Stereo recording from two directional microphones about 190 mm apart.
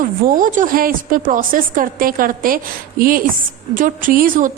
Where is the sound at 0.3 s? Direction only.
45° right (ahead or behind).